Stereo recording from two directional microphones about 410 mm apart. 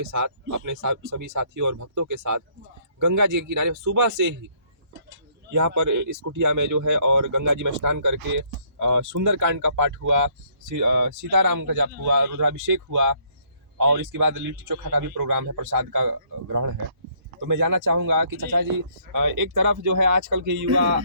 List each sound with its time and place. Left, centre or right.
0.0 s speech: right
5.5 s speech: right